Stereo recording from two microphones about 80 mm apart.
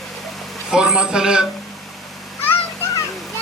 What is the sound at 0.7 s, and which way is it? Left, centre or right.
Speech, centre.